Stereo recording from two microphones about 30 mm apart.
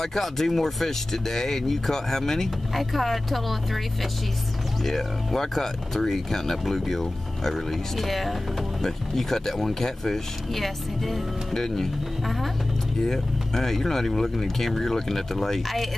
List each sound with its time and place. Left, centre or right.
0.0 s speech: centre
2.7 s speech: centre
4.8 s speech: centre
11.5 s speech: centre
13.0 s speech: centre